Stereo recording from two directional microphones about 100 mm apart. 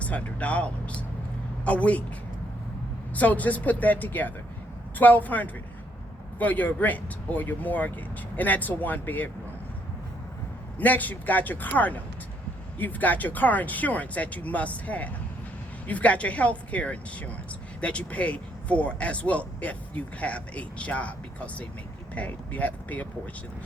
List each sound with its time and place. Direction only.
0.0 s speech: 15° left (ahead or behind)
3.2 s speech: 15° left (ahead or behind)
10.8 s speech: 15° left (ahead or behind)